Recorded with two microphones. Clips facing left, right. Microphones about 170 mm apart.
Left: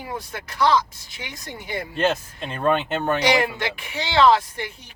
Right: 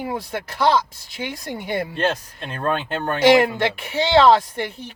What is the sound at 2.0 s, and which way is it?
Speech, 5° left (ahead or behind).